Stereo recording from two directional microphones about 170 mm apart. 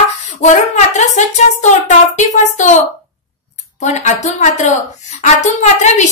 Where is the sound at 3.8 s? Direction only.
45° left (ahead or behind).